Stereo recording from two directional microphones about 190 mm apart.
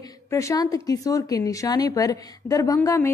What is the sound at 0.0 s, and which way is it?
A woman's voice, 15° left (ahead or behind).